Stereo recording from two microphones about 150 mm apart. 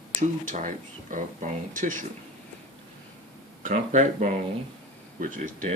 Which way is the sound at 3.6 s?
55° right (ahead or behind).